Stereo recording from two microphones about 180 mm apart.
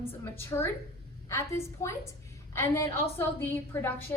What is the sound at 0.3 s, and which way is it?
A woman's voice, 15° left (ahead or behind).